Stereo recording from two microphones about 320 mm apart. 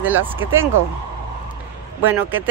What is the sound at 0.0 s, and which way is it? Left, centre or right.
Speech, centre.